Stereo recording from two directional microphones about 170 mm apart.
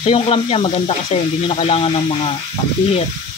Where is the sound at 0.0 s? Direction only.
35° left (ahead or behind).